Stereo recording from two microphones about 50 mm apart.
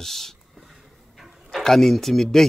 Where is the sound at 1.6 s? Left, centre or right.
Centre.